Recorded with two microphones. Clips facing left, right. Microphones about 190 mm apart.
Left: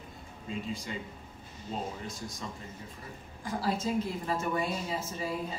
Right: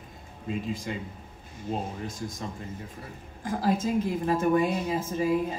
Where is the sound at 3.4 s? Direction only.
50° right (ahead or behind).